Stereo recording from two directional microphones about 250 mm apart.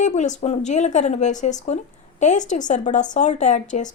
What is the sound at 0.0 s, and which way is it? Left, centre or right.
A woman's voice, left.